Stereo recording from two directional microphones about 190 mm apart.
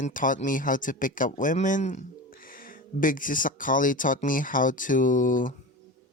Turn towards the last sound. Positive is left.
turn(degrees=45)  # may be behind; listen again after turning